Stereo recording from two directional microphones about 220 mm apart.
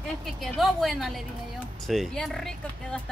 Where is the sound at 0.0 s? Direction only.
Centre (ahead or behind).